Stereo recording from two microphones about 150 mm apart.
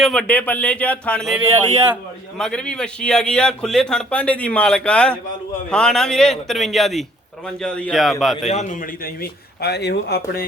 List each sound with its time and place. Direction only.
0.0 s speech: 5° left (ahead or behind)
1.5 s speech: 15° right (ahead or behind)
2.4 s a man's voice: 5° left (ahead or behind)
8.4 s a man's voice: 50° left (ahead or behind); by 10.4 s 90° left